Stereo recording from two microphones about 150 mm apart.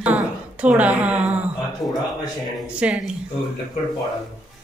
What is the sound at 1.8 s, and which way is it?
A man's voice, centre (ahead or behind).